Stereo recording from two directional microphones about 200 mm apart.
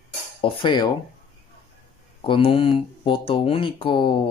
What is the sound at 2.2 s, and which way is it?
Speech, 25° left (ahead or behind).